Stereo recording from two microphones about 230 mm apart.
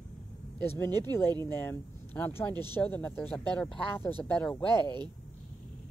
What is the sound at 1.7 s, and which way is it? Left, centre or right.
Speech, centre.